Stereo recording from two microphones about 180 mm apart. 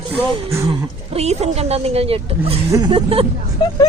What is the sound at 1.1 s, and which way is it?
A woman's voice, 35° right (ahead or behind).